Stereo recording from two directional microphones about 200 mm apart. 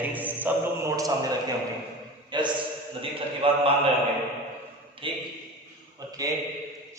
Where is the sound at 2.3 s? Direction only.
25° right (ahead or behind).